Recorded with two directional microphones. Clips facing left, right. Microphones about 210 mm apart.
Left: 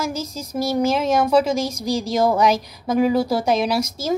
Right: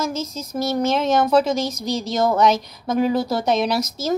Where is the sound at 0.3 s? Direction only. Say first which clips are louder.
Left 2 dB; 5° left (ahead or behind).